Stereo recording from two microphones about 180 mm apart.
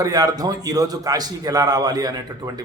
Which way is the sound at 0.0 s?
20° right (ahead or behind).